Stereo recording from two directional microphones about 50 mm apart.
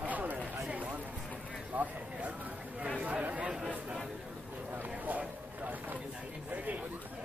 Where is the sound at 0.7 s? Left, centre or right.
Right.